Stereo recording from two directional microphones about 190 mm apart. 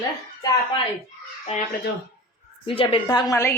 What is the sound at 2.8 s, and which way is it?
Speech, 30° left (ahead or behind).